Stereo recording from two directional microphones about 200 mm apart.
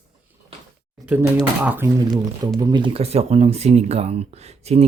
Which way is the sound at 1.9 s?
20° right (ahead or behind).